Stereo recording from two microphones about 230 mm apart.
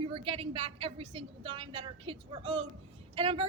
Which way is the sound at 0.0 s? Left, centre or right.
Right.